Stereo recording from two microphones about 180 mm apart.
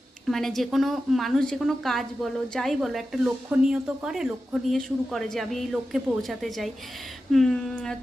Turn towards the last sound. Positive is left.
turn(degrees=5)  # may be behind; listen again after turning